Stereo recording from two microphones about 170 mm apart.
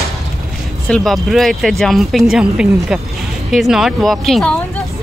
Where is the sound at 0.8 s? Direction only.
Centre (ahead or behind).